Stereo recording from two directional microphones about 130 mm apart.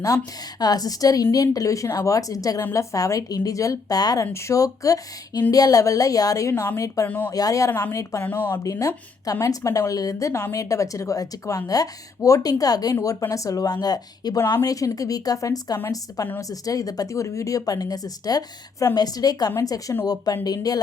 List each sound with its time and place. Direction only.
0.6 s a woman's voice: 30° left (ahead or behind)
8.2 s a woman's voice: 15° left (ahead or behind); by 20.7 s 30° left (ahead or behind)